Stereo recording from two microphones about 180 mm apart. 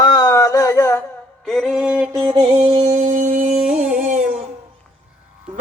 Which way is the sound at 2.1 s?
20° right (ahead or behind).